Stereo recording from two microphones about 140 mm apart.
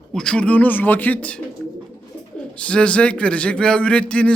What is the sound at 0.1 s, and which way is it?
A man's voice, 5° left (ahead or behind).